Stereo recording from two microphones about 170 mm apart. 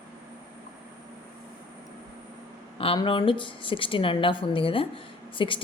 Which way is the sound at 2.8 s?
30° left (ahead or behind).